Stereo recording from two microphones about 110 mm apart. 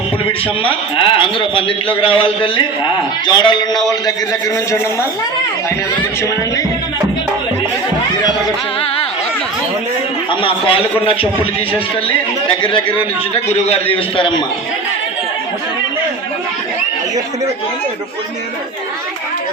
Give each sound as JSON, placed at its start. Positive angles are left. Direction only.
{"t": 0.3, "sound": "a man's voice", "side_deg": 55}
{"t": 10.4, "sound": "a man's voice", "side_deg": 55}
{"t": 13.3, "sound": "a man's voice", "side_deg": 70}